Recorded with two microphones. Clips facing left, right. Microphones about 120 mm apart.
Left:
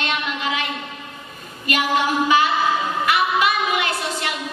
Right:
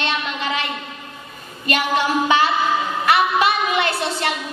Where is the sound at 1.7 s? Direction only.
30° right (ahead or behind).